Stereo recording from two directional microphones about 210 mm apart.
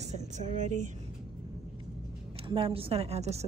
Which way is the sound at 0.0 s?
35° right (ahead or behind).